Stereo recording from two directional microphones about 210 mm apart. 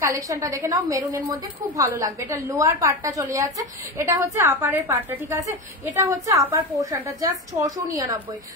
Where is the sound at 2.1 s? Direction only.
15° right (ahead or behind).